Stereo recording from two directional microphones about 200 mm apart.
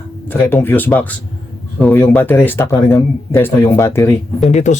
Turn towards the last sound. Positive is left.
turn(degrees=35)  # may be behind; listen again after turning